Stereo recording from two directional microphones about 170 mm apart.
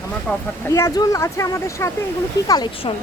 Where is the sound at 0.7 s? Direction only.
20° left (ahead or behind).